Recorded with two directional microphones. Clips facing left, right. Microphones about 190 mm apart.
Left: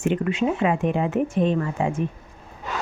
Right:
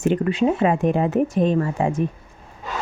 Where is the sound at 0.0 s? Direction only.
35° right (ahead or behind).